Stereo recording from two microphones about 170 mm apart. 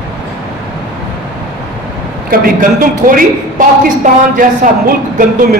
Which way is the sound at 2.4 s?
55° right (ahead or behind).